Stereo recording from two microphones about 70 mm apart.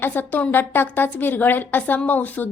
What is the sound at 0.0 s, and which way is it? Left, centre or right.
A woman's voice, left.